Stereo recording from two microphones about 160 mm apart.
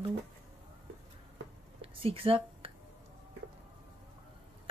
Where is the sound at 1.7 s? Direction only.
35° right (ahead or behind).